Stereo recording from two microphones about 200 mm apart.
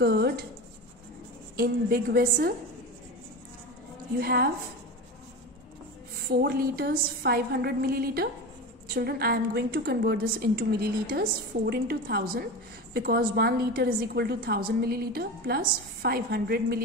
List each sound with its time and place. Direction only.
0.0 s speech: 55° right (ahead or behind)
1.6 s a woman's voice: 50° right (ahead or behind)
4.2 s a woman's voice: 50° right (ahead or behind)
6.2 s a woman's voice: 50° right (ahead or behind)